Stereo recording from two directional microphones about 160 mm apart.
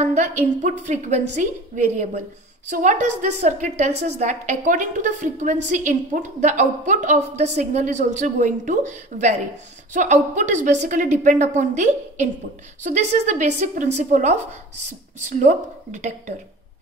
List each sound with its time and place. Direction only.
0.0 s a woman's voice: 45° right (ahead or behind)